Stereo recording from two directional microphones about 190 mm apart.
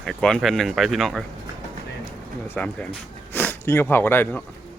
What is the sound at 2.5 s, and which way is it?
Speech, 5° left (ahead or behind).